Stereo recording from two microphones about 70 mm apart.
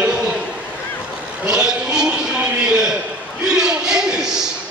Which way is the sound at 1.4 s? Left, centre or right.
Centre.